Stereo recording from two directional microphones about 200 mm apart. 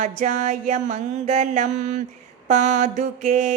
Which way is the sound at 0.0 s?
40° right (ahead or behind).